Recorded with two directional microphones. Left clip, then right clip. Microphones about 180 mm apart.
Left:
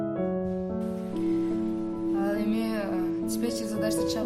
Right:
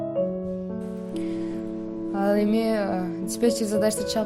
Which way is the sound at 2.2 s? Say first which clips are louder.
Right 6 dB; 45° right (ahead or behind).